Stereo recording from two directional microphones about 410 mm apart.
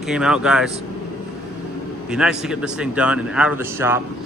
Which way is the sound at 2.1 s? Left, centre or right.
Centre.